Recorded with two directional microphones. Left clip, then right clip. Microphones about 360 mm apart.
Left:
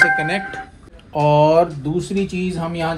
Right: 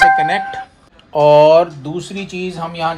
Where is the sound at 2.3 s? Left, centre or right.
Centre.